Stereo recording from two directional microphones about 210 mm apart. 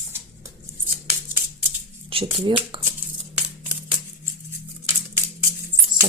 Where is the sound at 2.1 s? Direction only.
25° right (ahead or behind).